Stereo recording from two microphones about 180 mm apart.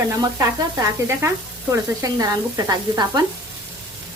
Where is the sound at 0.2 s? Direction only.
20° right (ahead or behind).